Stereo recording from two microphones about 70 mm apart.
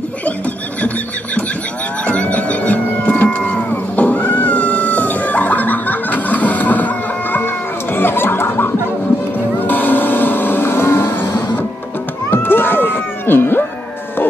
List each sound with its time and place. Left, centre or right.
2.0 s livestock: centre
7.3 s music: left
9.6 s a sound: left
12.3 s cat: left